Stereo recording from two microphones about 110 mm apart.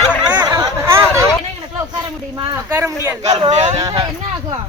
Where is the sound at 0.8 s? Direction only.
25° right (ahead or behind).